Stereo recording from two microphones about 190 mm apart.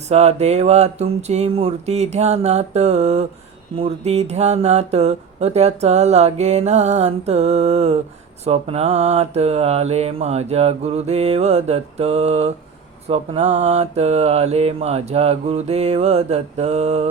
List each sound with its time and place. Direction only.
0.1 s speech: 35° right (ahead or behind)